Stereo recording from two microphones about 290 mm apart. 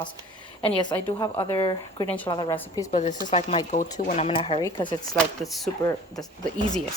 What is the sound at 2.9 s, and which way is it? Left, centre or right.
A woman's voice, left.